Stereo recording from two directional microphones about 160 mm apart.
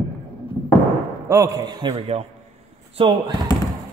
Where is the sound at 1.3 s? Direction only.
20° right (ahead or behind).